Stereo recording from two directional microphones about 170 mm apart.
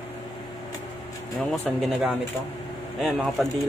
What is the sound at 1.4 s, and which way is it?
Speech, centre (ahead or behind).